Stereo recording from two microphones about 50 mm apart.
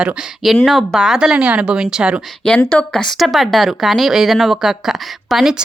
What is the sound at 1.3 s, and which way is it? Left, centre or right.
Speech, right.